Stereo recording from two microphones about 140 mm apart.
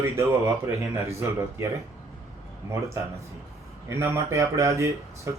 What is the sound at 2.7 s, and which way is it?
Speech, 20° right (ahead or behind).